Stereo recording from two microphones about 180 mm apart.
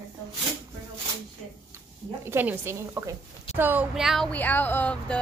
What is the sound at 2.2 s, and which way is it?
A woman's voice, 10° right (ahead or behind).